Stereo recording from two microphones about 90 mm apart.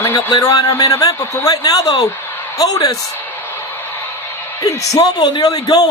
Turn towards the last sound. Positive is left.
turn(degrees=45)  # may be behind; listen again after turning